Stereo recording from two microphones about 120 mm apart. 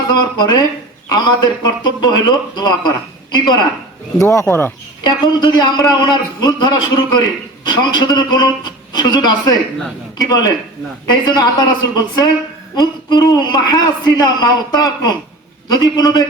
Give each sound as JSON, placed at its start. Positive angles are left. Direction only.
{"t": 0.1, "sound": "a man's voice", "side_deg": 35}
{"t": 4.2, "sound": "speech", "side_deg": 25}
{"t": 5.0, "sound": "a man's voice", "side_deg": 40}